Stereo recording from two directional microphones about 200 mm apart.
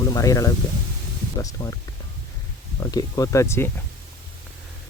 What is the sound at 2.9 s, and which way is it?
Speech, 20° left (ahead or behind).